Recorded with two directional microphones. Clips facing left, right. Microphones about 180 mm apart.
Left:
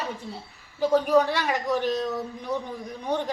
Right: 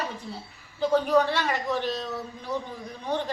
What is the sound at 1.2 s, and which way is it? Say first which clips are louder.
A woman's voice: left 1 dB; 15° left (ahead or behind).